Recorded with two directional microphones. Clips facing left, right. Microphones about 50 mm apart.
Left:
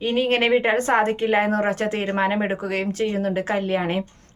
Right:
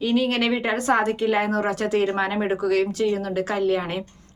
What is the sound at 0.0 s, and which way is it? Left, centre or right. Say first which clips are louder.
A woman's voice: left 1 dB; left.